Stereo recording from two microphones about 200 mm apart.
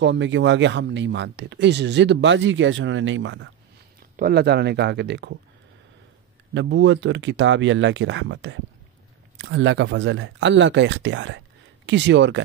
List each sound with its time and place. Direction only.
0.0 s speech: 65° right (ahead or behind)
4.2 s speech: 55° right (ahead or behind)
6.5 s speech: 60° right (ahead or behind)